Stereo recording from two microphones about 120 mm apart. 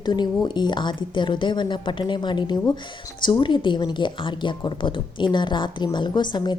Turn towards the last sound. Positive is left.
turn(degrees=35)  # may be behind; listen again after turning